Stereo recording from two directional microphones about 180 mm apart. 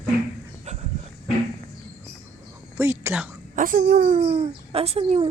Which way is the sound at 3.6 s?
50° right (ahead or behind).